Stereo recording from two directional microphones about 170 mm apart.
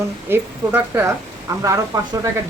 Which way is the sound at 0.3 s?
15° right (ahead or behind).